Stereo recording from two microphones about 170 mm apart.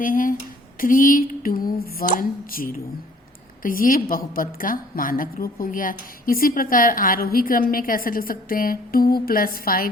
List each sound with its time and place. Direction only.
0.0 s a woman's voice: 55° left (ahead or behind)